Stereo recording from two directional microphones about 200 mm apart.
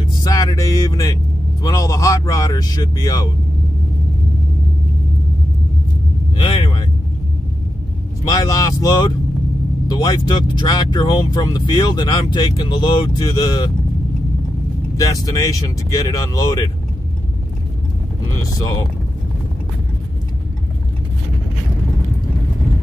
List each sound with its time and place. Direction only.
0.0 s music: 15° left (ahead or behind)
1.6 s speech: 15° left (ahead or behind)
6.3 s vehicle: 25° left (ahead or behind)
8.3 s speech: 15° left (ahead or behind)
15.0 s speech: 15° left (ahead or behind)
18.6 s speech: 20° left (ahead or behind)